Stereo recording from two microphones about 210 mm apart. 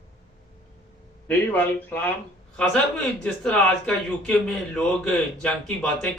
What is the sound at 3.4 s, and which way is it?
A man's voice, 5° left (ahead or behind).